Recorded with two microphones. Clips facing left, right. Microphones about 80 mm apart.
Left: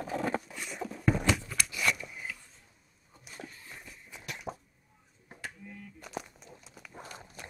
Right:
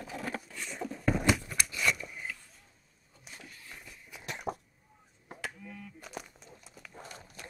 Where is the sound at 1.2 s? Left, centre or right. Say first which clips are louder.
Right 1 dB; centre.